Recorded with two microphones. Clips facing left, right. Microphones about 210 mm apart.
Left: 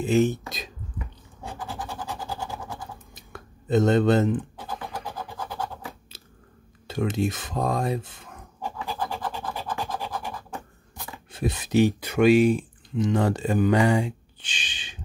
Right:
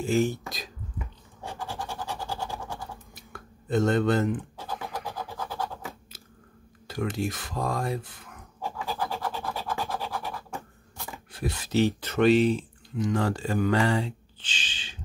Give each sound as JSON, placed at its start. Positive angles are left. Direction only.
{"t": 0.0, "sound": "speech", "side_deg": 20}
{"t": 1.8, "sound": "a sound", "side_deg": 15}
{"t": 5.4, "sound": "scratch", "side_deg": 15}
{"t": 6.9, "sound": "speech", "side_deg": 20}
{"t": 8.8, "sound": "scratch", "side_deg": 15}
{"t": 11.3, "sound": "speech", "side_deg": 20}